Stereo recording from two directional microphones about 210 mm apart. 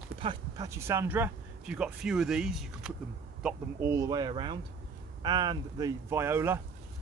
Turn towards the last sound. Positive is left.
turn(degrees=-10)  # may be behind; listen again after turning